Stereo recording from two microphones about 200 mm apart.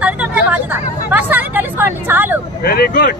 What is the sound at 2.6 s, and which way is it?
Speech, 50° left (ahead or behind).